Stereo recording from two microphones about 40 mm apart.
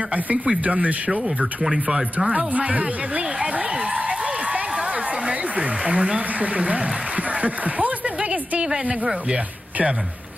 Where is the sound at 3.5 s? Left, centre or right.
Right.